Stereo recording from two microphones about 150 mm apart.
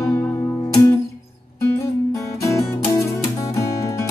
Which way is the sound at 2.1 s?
20° left (ahead or behind).